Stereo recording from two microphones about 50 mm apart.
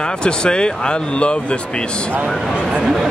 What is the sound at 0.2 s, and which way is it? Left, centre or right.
Speech, centre.